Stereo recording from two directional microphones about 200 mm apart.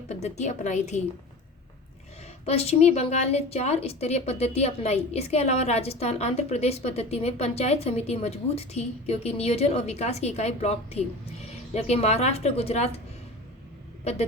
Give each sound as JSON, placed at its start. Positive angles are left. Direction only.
{"t": 0.1, "sound": "a woman's voice", "side_deg": 35}
{"t": 2.5, "sound": "a woman's voice", "side_deg": 30}
{"t": 14.0, "sound": "speech", "side_deg": 35}